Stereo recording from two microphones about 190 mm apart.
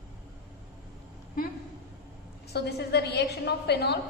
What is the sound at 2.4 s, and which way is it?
A woman's voice, 60° left (ahead or behind).